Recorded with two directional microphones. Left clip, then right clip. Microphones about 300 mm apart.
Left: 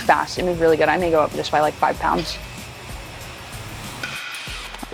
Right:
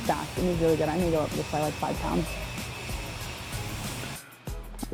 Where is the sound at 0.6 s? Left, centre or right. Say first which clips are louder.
Left 10 dB; centre.